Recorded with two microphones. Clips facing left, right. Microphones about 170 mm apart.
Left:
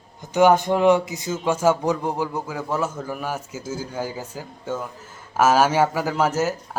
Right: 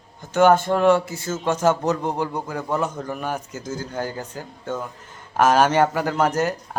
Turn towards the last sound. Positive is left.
turn(degrees=5)  # may be behind; listen again after turning